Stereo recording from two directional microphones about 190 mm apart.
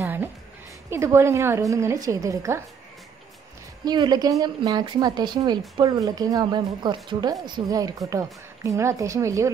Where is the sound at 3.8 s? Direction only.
20° right (ahead or behind).